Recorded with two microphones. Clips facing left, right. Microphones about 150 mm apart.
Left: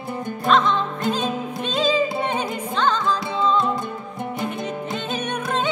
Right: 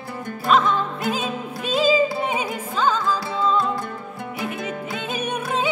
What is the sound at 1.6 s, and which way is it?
Music, 5° right (ahead or behind).